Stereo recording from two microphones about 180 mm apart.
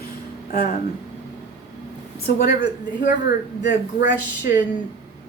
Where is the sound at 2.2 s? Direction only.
60° left (ahead or behind).